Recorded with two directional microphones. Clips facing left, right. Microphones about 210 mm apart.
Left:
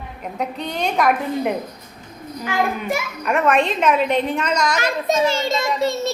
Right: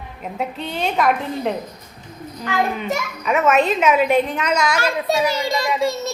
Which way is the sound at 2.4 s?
10° left (ahead or behind).